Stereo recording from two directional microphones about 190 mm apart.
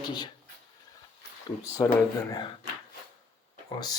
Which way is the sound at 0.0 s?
20° left (ahead or behind).